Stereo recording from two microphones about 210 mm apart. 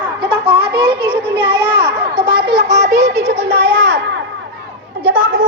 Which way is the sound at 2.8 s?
35° right (ahead or behind).